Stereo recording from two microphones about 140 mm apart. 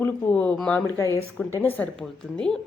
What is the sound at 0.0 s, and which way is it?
Speech, 10° left (ahead or behind).